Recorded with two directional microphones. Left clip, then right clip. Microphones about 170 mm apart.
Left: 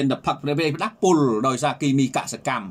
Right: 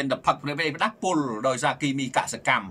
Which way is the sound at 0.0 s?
20° left (ahead or behind).